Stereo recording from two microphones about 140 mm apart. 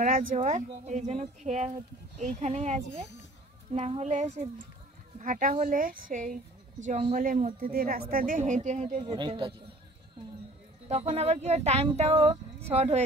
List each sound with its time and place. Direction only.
0.0 s a woman's voice: 75° right (ahead or behind)
6.9 s speech: 55° right (ahead or behind)
9.0 s speech: 35° right (ahead or behind)
10.9 s speech: 50° right (ahead or behind)